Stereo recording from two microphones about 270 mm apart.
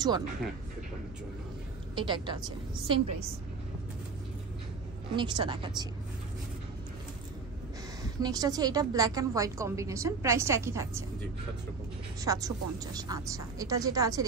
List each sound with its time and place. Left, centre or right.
2.0 s a woman's voice: centre
5.1 s a woman's voice: centre
8.2 s a woman's voice: centre
12.3 s a woman's voice: centre